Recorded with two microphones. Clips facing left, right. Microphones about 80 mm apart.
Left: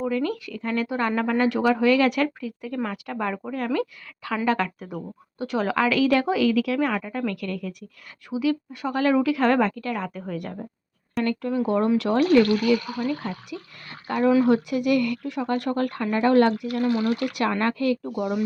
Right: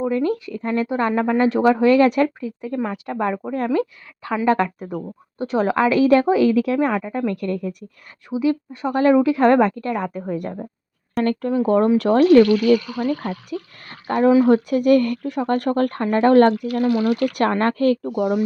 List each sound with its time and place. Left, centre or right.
0.0 s speech: right
6.9 s speech: centre
7.3 s speech: right
16.9 s speech: left
17.2 s speech: right